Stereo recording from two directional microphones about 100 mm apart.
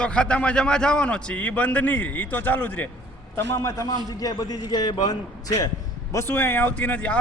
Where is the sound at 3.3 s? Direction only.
30° left (ahead or behind).